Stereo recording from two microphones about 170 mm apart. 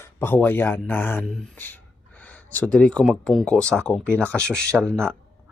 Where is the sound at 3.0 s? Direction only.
Centre (ahead or behind).